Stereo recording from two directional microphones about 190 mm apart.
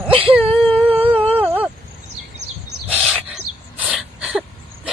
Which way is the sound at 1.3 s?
10° right (ahead or behind).